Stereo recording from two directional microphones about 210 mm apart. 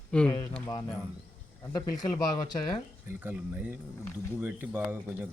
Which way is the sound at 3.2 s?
10° right (ahead or behind).